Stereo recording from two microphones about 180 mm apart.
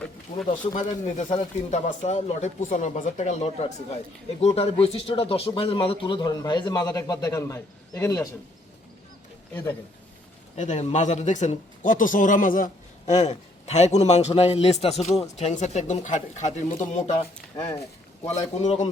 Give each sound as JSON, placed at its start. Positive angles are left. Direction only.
{"t": 0.6, "sound": "a man's voice", "side_deg": 45}
{"t": 10.5, "sound": "a man's voice", "side_deg": 40}
{"t": 18.3, "sound": "a man's voice", "side_deg": 40}